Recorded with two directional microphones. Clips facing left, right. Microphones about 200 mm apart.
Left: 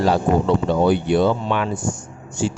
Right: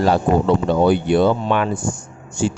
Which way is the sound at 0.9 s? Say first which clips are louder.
Right 2 dB; 55° right (ahead or behind).